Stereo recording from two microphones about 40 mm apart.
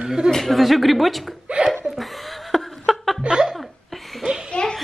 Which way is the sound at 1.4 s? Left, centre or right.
Right.